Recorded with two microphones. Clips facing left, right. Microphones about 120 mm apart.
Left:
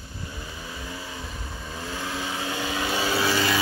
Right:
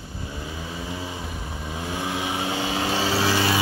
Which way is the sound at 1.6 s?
20° right (ahead or behind).